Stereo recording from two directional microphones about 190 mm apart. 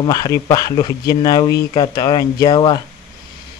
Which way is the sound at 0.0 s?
20° left (ahead or behind).